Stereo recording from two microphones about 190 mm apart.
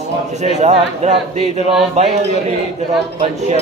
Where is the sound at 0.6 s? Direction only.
35° right (ahead or behind).